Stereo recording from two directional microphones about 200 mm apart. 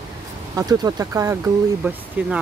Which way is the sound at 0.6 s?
20° right (ahead or behind).